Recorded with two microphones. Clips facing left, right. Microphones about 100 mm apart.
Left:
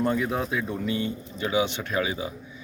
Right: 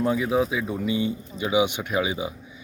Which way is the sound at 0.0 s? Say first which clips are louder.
Right 3 dB; 5° right (ahead or behind).